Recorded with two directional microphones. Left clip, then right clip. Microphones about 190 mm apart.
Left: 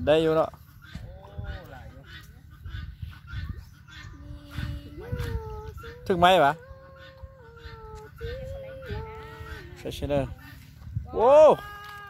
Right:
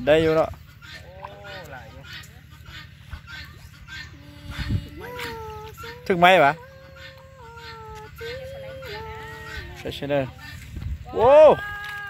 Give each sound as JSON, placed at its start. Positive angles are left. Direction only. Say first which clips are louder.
{"t": 0.0, "sound": "speech", "louder": "right 3 dB", "side_deg": 10}
{"t": 1.4, "sound": "a sound", "louder": "right 6 dB", "side_deg": 50}
{"t": 6.0, "sound": "speech", "louder": "right 4 dB", "side_deg": 5}
{"t": 8.2, "sound": "music", "louder": "right 3 dB", "side_deg": 55}
{"t": 9.8, "sound": "speech", "louder": "right 3 dB", "side_deg": 5}